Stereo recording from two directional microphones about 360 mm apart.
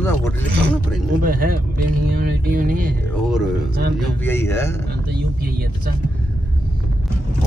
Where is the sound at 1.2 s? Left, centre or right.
Right.